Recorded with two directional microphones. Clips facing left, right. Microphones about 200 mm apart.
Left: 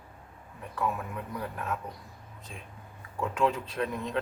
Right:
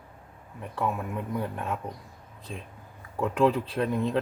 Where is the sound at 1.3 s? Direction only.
30° right (ahead or behind).